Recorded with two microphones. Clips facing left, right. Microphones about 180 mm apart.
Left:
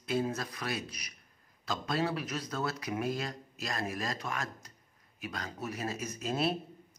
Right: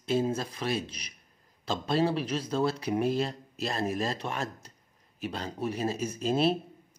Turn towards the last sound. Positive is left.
turn(degrees=-30)  # may be behind; listen again after turning